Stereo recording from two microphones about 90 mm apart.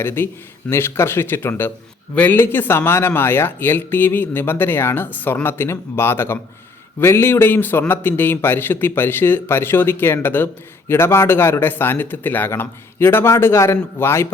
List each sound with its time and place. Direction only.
0.0 s a man's voice: 25° left (ahead or behind)